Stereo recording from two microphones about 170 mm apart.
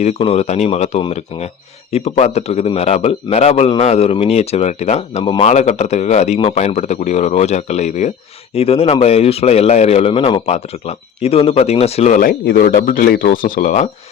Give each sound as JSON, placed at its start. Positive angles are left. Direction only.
{"t": 0.0, "sound": "speech", "side_deg": 35}